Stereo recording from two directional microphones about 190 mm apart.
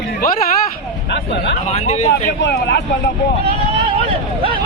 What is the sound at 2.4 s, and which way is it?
Speech, 65° left (ahead or behind).